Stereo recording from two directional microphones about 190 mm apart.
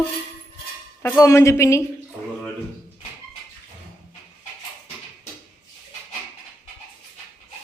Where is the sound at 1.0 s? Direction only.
15° left (ahead or behind).